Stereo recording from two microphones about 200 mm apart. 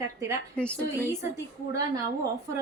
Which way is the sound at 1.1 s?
15° right (ahead or behind).